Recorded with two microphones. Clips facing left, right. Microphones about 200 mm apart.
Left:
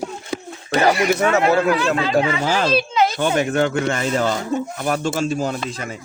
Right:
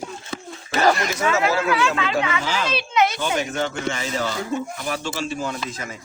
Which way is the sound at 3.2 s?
60° left (ahead or behind).